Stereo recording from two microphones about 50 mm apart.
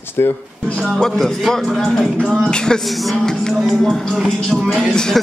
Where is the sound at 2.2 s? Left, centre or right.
Left.